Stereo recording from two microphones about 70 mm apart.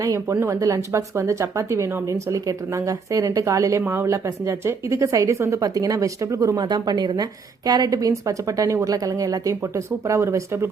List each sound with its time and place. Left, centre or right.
0.0 s a woman's voice: right
4.1 s a woman's voice: right
6.6 s speech: right
7.7 s a woman's voice: right